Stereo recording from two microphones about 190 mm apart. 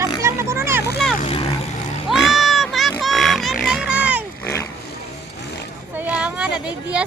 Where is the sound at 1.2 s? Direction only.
35° left (ahead or behind).